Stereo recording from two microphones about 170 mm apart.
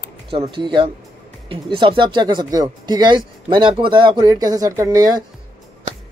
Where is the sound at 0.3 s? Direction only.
30° right (ahead or behind).